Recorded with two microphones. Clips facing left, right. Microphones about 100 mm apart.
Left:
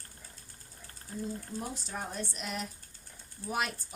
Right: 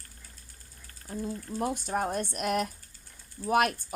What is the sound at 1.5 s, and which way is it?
Speech, 60° right (ahead or behind).